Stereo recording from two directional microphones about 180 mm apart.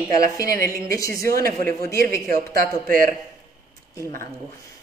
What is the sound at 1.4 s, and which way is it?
A man's voice, 55° right (ahead or behind).